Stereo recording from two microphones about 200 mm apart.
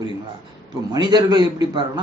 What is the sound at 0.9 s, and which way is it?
Speech, 20° right (ahead or behind).